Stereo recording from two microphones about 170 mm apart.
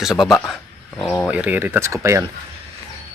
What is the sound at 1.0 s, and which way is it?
Speech, 15° left (ahead or behind).